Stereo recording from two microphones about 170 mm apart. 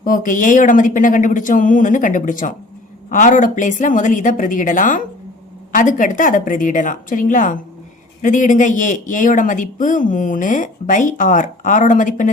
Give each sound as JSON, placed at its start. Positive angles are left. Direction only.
{"t": 0.0, "sound": "speech", "side_deg": 50}